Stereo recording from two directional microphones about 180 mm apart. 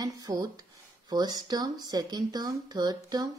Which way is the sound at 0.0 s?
20° right (ahead or behind).